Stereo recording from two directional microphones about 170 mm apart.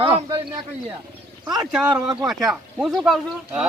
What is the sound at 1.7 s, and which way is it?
Speech, 5° right (ahead or behind).